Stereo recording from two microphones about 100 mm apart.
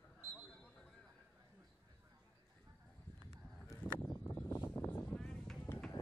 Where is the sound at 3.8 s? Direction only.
20° left (ahead or behind).